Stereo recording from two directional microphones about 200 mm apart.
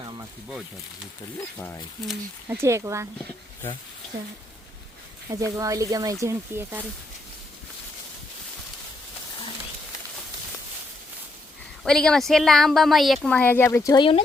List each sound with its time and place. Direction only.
0.0 s a sound: 25° right (ahead or behind)
1.4 s speech: 15° left (ahead or behind)
2.0 s speech: 10° right (ahead or behind)
5.5 s speech: 15° right (ahead or behind)
11.8 s a woman's voice: 5° left (ahead or behind); by 14.2 s 20° left (ahead or behind)